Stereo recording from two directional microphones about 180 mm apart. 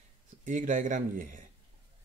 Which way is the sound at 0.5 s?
45° right (ahead or behind).